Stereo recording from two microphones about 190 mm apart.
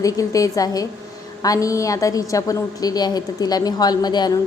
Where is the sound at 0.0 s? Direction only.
15° left (ahead or behind).